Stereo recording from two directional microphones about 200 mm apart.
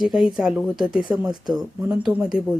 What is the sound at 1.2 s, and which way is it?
Speech, 20° right (ahead or behind).